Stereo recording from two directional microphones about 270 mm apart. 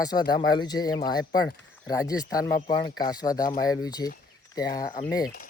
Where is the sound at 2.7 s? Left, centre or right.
Centre.